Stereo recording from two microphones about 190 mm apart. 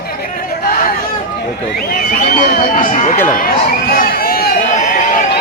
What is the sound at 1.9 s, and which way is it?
Speech, 45° left (ahead or behind).